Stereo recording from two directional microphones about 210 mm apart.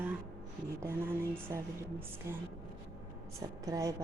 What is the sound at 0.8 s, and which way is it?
Speech, 10° right (ahead or behind).